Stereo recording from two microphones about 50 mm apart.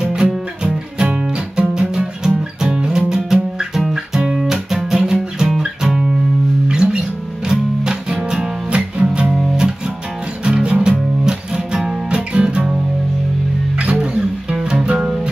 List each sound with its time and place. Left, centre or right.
0.0 s music: centre
3.3 s music: centre
13.9 s music: centre